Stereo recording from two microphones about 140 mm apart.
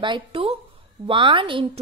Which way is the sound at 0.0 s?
35° right (ahead or behind).